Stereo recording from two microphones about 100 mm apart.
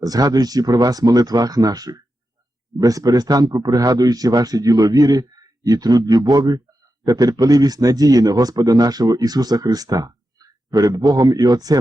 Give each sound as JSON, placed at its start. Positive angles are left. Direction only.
{"t": 0.0, "sound": "speech", "side_deg": -40}